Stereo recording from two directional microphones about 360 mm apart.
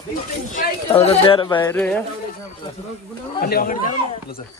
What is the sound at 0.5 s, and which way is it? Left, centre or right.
Speech, centre.